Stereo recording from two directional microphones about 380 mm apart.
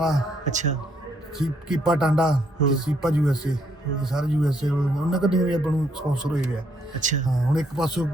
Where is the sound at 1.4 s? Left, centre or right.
Centre.